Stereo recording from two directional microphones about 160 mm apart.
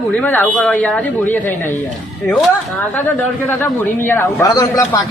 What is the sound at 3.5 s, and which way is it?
A man's voice, 10° left (ahead or behind).